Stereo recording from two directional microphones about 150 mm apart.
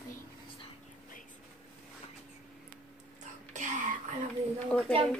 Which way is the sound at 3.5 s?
60° right (ahead or behind).